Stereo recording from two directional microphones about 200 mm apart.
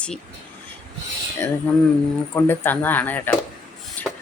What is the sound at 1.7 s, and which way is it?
Speech, 10° left (ahead or behind).